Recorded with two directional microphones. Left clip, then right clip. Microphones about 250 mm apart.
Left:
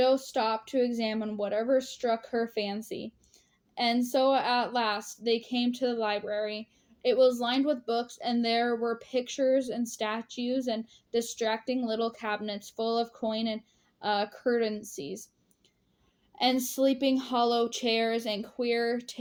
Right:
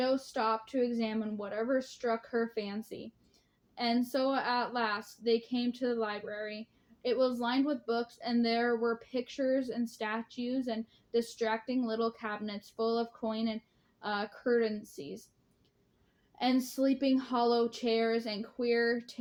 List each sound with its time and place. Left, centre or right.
0.0 s a woman's voice: left
16.3 s a woman's voice: left